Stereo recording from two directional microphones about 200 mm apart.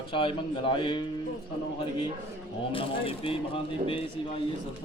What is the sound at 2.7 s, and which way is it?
A man's voice, 25° left (ahead or behind).